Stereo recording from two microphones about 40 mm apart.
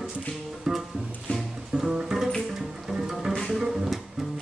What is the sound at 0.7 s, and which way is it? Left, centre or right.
Music, centre.